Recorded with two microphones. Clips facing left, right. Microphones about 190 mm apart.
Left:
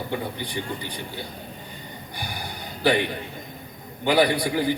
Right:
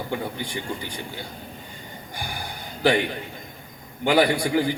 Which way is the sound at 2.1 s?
45° right (ahead or behind).